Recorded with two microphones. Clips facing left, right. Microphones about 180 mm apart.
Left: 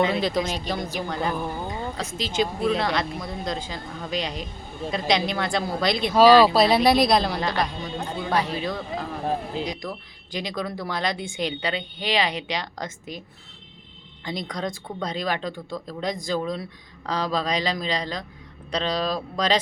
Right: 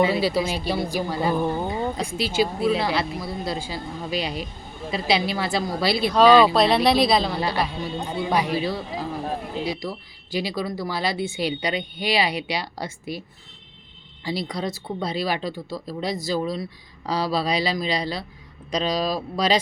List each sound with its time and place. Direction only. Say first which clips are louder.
0.0 s speech: right 2 dB; 10° right (ahead or behind)
1.3 s speech: right 5 dB; 20° right (ahead or behind); by 6.1 s 5° right (ahead or behind)
6.1 s speech: left 1 dB; 5° left (ahead or behind)
10.3 s speech: right 3 dB; 5° right (ahead or behind)
14.3 s speech: right 2 dB; 5° right (ahead or behind)